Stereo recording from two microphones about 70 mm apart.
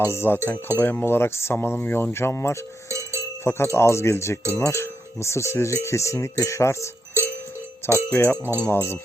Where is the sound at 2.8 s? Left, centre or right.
Right.